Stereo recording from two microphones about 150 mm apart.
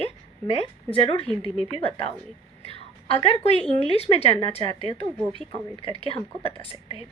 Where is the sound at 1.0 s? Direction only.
40° left (ahead or behind).